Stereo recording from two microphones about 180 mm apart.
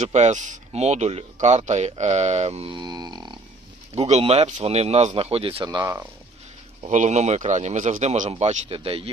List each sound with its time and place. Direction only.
0.0 s speech: 40° right (ahead or behind); by 3.4 s 25° right (ahead or behind)
3.9 s speech: 35° right (ahead or behind); by 6.1 s 15° right (ahead or behind)
6.8 s speech: 40° right (ahead or behind)